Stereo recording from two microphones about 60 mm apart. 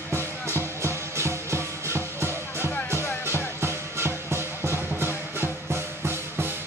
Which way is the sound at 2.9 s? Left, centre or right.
Left.